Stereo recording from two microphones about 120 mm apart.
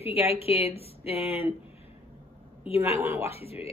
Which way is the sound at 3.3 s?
55° left (ahead or behind).